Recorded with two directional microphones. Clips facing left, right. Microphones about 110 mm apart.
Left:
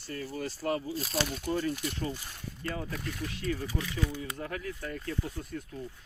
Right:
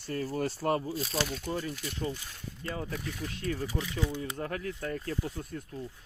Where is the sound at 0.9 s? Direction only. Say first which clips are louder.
Even; 5° left (ahead or behind).